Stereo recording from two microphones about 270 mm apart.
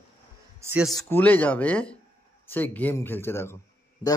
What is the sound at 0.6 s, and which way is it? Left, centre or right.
A man's voice, centre.